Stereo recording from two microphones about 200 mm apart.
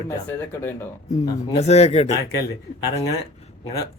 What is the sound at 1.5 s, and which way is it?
Speech, 30° left (ahead or behind).